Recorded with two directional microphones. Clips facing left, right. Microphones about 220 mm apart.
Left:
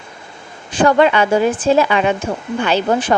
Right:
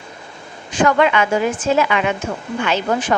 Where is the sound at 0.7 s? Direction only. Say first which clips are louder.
Left 3 dB; 30° left (ahead or behind).